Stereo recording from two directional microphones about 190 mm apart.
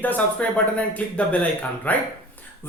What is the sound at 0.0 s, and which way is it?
Speech, 10° left (ahead or behind).